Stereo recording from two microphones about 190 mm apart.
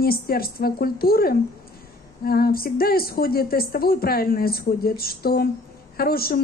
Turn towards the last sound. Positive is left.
turn(degrees=55)  # may be behind; listen again after turning